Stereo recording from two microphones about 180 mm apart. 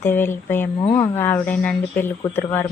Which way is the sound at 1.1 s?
15° left (ahead or behind).